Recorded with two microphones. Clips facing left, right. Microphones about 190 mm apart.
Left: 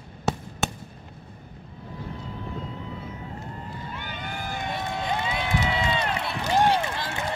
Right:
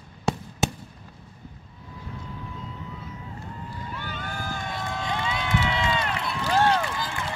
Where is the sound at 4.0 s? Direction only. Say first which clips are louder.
Right 1 dB; 15° left (ahead or behind).